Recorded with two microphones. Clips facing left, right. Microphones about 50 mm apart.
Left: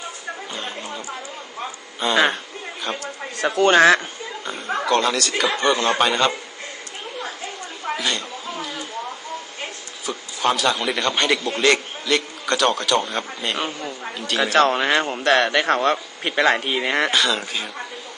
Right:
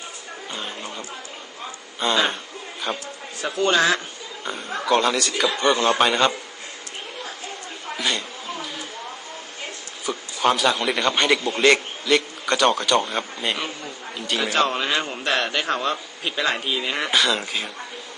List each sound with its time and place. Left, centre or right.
0.5 s chatter: centre
2.0 s speech: centre
3.0 s speech: left
4.4 s speech: centre
7.9 s speech: centre
10.1 s a man's voice: centre
13.6 s speech: left
14.2 s speech: centre
14.5 s a man's voice: left
15.2 s speech: left
17.1 s speech: centre